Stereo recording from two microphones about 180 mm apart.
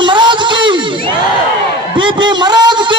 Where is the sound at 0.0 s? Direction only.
25° right (ahead or behind).